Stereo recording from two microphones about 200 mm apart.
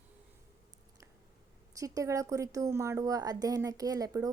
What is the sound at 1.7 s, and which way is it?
A woman's voice, 15° right (ahead or behind).